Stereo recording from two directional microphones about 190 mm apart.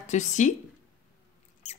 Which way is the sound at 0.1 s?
40° left (ahead or behind).